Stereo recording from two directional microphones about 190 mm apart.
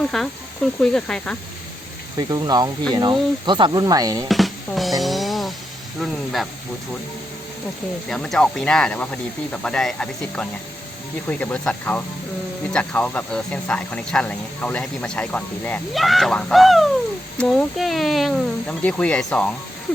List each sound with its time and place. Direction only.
0.0 s speech: centre (ahead or behind)
2.1 s speech: 20° right (ahead or behind)
4.3 s drum: centre (ahead or behind)
6.0 s speech: centre (ahead or behind)
8.1 s speech: 5° left (ahead or behind)